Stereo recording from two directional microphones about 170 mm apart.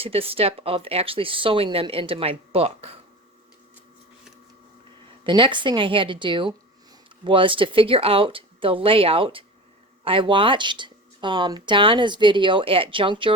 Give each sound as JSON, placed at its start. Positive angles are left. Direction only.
{"t": 0.0, "sound": "speech", "side_deg": -35}
{"t": 5.2, "sound": "speech", "side_deg": -30}